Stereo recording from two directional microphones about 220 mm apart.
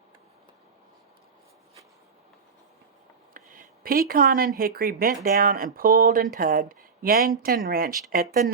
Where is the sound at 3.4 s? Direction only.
40° right (ahead or behind).